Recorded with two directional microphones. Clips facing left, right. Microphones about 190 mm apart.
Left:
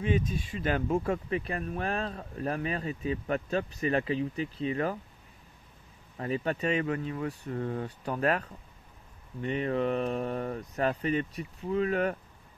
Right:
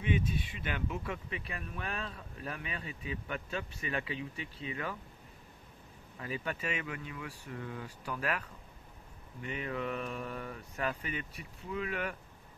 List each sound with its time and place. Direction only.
0.3 s speech: 40° left (ahead or behind)
6.1 s speech: 35° left (ahead or behind)